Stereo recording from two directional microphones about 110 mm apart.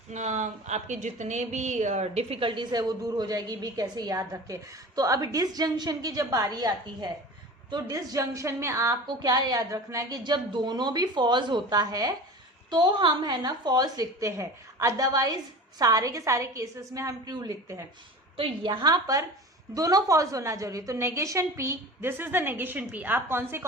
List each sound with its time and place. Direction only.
0.1 s a woman's voice: 90° right; by 9.0 s 25° right (ahead or behind)
9.0 s a woman's voice: 40° right (ahead or behind)
18.3 s a woman's voice: 50° right (ahead or behind); by 23.6 s 20° right (ahead or behind)